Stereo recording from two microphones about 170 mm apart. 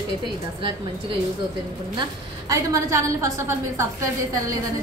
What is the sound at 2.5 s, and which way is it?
A woman's voice, 20° right (ahead or behind).